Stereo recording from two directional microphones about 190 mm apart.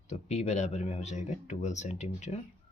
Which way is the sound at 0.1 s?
35° left (ahead or behind).